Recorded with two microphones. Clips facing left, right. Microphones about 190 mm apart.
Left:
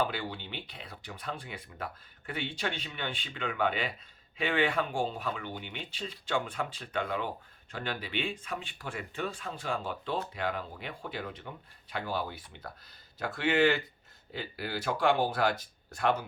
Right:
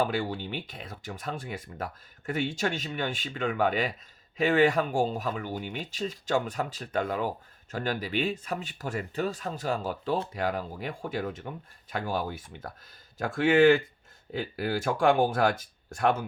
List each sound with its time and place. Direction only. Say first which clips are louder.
0.0 s speech: right 5 dB; 45° right (ahead or behind)